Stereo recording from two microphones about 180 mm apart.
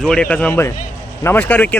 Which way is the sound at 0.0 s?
5° left (ahead or behind).